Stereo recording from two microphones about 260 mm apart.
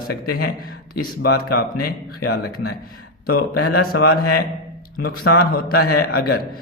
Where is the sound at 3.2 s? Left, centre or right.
Left.